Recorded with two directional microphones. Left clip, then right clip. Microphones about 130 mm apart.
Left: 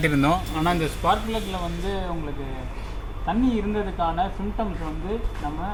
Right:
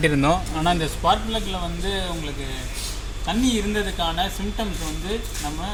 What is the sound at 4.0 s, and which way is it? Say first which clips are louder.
Speech: even; 35° right (ahead or behind).